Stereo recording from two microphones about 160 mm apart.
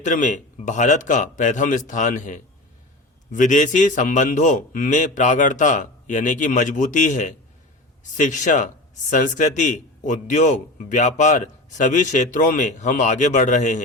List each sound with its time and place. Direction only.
0.0 s speech: 50° left (ahead or behind)